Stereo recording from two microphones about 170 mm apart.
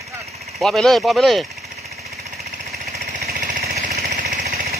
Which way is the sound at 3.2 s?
60° right (ahead or behind).